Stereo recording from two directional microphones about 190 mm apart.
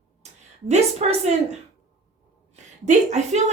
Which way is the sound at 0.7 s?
35° right (ahead or behind).